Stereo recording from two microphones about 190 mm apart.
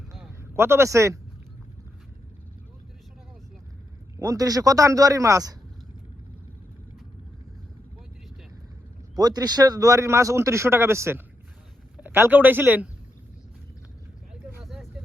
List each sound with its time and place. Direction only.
0.5 s a man's voice: 15° right (ahead or behind)
4.2 s a man's voice: 15° right (ahead or behind)
9.1 s a man's voice: 20° right (ahead or behind)
14.6 s vehicle: centre (ahead or behind)